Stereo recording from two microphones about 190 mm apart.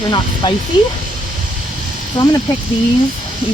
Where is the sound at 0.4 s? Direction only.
25° left (ahead or behind).